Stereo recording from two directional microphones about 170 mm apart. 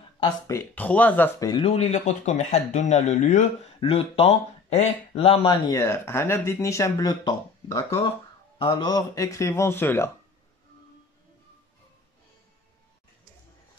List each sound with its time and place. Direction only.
0.5 s speech: 10° left (ahead or behind)
1.5 s speech: 35° left (ahead or behind)
5.7 s speech: 15° left (ahead or behind)